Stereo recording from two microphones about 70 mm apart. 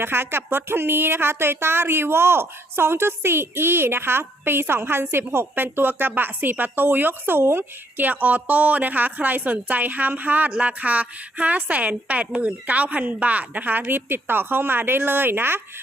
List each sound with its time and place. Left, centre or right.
0.0 s speech: right